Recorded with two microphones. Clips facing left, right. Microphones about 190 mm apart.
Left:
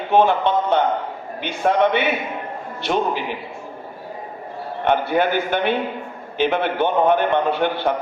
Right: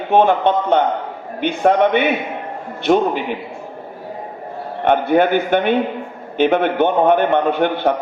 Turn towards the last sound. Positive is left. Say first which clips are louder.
# right 3 dB
turn(degrees=-55)  # may be behind; listen again after turning